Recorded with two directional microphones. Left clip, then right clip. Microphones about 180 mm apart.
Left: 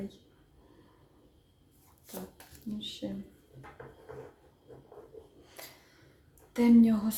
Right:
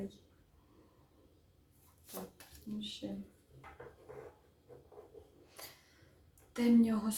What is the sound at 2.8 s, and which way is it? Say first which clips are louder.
Speech: left 4 dB; 15° left (ahead or behind).